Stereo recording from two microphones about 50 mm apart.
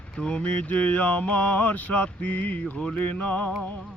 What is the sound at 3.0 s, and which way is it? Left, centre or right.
Mantra, left.